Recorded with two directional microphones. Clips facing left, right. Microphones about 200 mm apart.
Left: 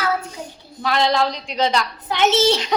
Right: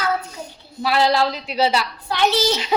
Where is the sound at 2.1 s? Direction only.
20° left (ahead or behind).